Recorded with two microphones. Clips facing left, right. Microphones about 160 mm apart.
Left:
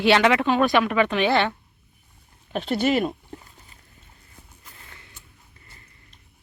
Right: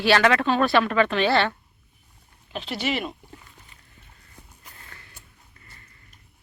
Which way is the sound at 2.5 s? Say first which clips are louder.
Left 6 dB; 50° left (ahead or behind).